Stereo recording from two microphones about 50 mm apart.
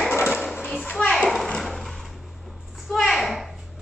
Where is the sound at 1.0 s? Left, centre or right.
Left.